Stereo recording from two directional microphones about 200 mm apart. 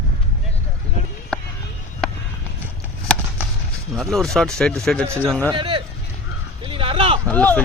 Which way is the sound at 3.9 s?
Centre (ahead or behind).